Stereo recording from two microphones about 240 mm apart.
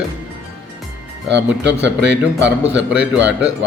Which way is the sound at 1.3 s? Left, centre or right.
Right.